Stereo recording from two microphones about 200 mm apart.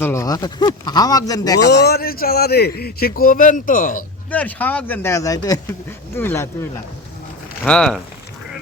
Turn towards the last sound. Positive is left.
turn(degrees=5)  # may be behind; listen again after turning